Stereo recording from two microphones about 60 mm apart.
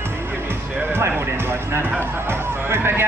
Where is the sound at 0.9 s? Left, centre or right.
Right.